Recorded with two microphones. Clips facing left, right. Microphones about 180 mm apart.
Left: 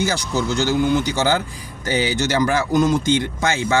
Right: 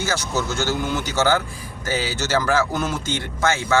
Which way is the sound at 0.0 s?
15° left (ahead or behind).